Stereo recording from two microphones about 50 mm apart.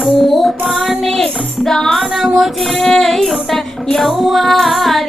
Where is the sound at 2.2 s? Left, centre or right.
Centre.